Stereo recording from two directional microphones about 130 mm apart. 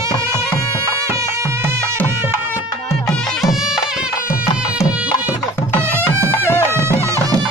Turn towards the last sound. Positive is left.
turn(degrees=-20)  # may be behind; listen again after turning